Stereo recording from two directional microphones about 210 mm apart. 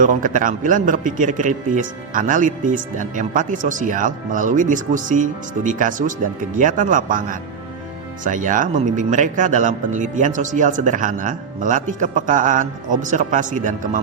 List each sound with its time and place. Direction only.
0.0 s a man's voice: 40° right (ahead or behind)